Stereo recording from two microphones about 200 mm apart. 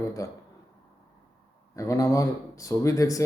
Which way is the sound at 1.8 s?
15° left (ahead or behind).